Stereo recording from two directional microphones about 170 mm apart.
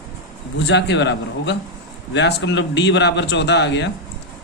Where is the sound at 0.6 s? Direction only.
90° left.